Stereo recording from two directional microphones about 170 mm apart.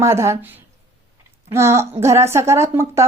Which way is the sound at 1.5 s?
15° right (ahead or behind).